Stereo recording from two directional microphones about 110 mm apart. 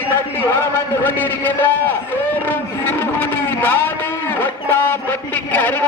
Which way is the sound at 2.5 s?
15° left (ahead or behind).